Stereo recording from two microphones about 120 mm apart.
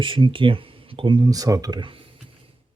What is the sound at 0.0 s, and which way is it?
Speech, 45° right (ahead or behind).